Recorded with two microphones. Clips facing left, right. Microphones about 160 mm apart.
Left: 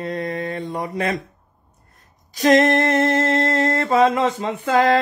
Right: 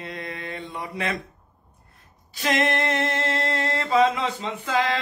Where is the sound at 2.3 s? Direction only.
40° left (ahead or behind).